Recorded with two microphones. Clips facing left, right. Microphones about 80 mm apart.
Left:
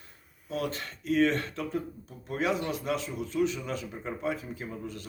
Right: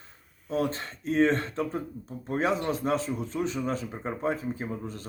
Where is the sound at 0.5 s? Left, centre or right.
Right.